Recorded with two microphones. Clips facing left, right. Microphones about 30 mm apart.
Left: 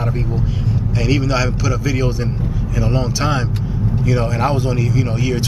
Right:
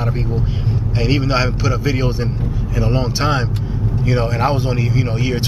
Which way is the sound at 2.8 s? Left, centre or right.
Centre.